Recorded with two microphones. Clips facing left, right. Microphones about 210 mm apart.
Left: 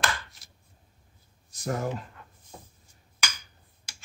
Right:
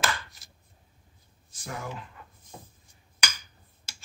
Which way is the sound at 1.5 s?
40° left (ahead or behind).